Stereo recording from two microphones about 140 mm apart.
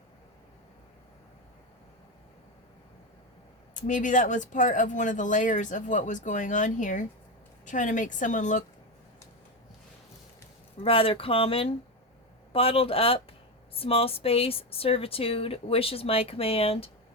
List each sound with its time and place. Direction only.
3.8 s speech: 65° left (ahead or behind)
10.8 s speech: 40° left (ahead or behind)